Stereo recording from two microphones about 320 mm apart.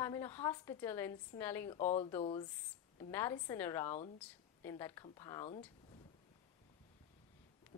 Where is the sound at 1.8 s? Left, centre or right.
Left.